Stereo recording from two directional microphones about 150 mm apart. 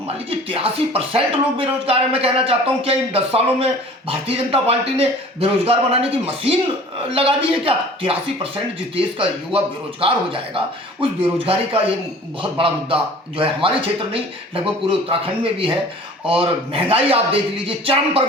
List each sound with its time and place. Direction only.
0.3 s music: 40° right (ahead or behind)